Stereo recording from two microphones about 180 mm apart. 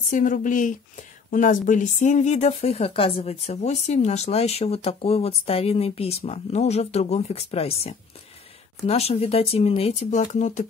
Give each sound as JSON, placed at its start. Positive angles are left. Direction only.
{"t": 0.1, "sound": "speech", "side_deg": 45}